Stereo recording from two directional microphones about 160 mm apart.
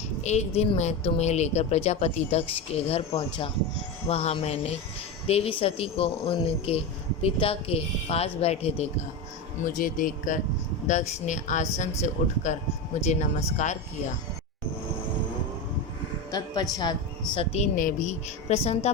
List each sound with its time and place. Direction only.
0.2 s speech: 45° left (ahead or behind)
9.6 s speech: 60° left (ahead or behind)
16.3 s speech: 25° left (ahead or behind)
17.3 s speech: 40° left (ahead or behind)
17.7 s speech: 55° left (ahead or behind)